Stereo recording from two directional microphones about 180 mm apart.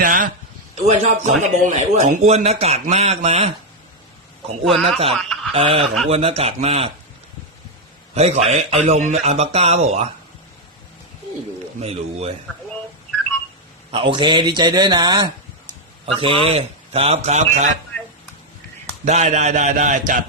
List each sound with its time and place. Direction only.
0.0 s a sound: 50° right (ahead or behind)
0.8 s speech: 40° right (ahead or behind)
4.6 s speech: centre (ahead or behind)
5.5 s speech: 30° right (ahead or behind)
8.1 s speech: 35° right (ahead or behind)
11.8 s speech: 35° right (ahead or behind)
13.9 s a man's voice: 30° right (ahead or behind)
19.0 s a man's voice: 40° right (ahead or behind)